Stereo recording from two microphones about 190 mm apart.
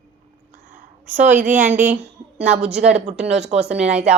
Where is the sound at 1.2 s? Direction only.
40° right (ahead or behind).